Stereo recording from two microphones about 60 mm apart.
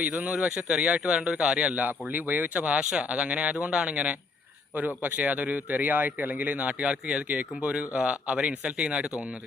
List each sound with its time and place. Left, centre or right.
0.0 s a man's voice: right